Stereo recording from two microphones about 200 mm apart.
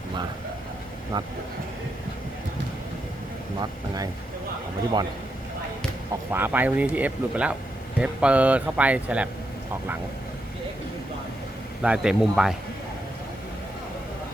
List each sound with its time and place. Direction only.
1.1 s speech: 20° right (ahead or behind)
3.6 s speech: 20° right (ahead or behind)
6.3 s speech: 10° right (ahead or behind)
11.8 s speech: 5° right (ahead or behind)